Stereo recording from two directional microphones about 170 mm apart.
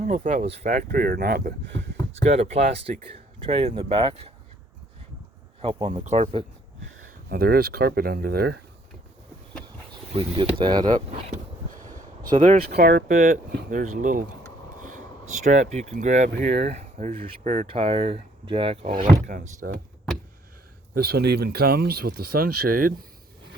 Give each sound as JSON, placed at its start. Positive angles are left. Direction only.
{"t": 0.3, "sound": "speech", "side_deg": -45}
{"t": 2.2, "sound": "speech", "side_deg": -40}
{"t": 5.6, "sound": "speech", "side_deg": -40}
{"t": 7.3, "sound": "speech", "side_deg": -60}
{"t": 10.1, "sound": "speech", "side_deg": -30}
{"t": 11.7, "sound": "speech", "side_deg": -50}
{"t": 17.7, "sound": "speech", "side_deg": -35}
{"t": 18.9, "sound": "speech", "side_deg": -50}
{"t": 20.9, "sound": "speech", "side_deg": -65}